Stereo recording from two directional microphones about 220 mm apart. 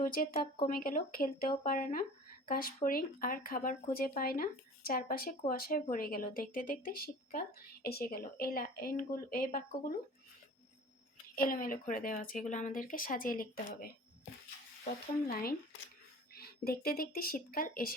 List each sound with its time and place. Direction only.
0.0 s speech: 40° left (ahead or behind)
11.3 s speech: 40° left (ahead or behind)
15.3 s speech: 40° left (ahead or behind)